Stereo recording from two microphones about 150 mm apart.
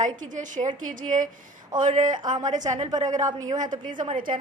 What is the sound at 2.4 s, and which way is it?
Speech, 55° right (ahead or behind).